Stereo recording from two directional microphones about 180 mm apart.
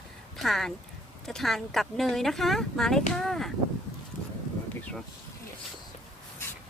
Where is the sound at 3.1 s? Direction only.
Centre (ahead or behind).